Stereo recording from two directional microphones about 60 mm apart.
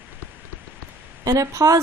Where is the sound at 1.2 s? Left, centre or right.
Right.